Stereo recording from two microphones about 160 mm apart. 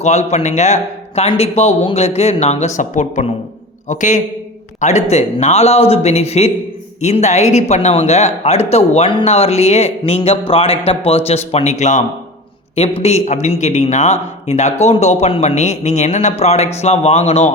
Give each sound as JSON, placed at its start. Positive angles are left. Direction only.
{"t": 0.0, "sound": "a man's voice", "side_deg": 45}